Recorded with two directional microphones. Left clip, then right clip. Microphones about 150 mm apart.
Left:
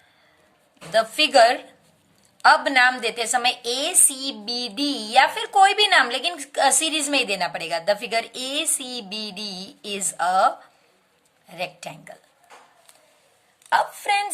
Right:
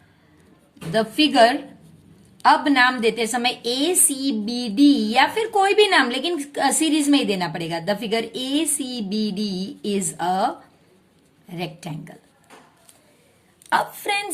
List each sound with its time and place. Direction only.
0.9 s a woman's voice: 35° left (ahead or behind)
13.7 s a woman's voice: 5° left (ahead or behind)